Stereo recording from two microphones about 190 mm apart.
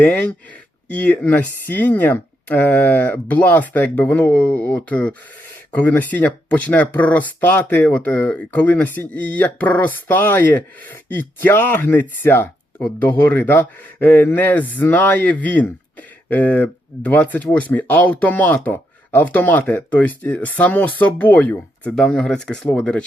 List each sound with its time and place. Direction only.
0.0 s speech: 5° left (ahead or behind)